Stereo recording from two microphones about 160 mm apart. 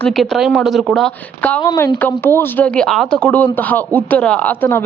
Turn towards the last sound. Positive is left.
turn(degrees=15)  # may be behind; listen again after turning